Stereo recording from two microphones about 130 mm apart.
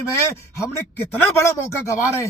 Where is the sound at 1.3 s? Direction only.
20° left (ahead or behind).